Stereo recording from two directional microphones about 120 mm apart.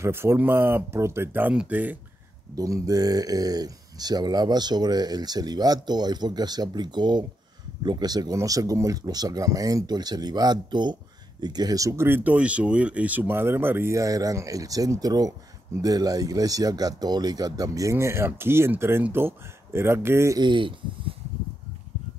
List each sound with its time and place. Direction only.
0.0 s speech: 20° right (ahead or behind)
2.5 s speech: 30° right (ahead or behind)
20.3 s speech: 40° right (ahead or behind)